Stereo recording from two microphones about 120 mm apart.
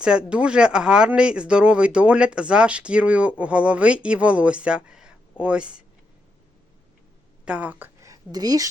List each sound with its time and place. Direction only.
0.0 s speech: 10° right (ahead or behind)
7.4 s speech: 10° right (ahead or behind)
8.0 s a woman's voice: 30° right (ahead or behind)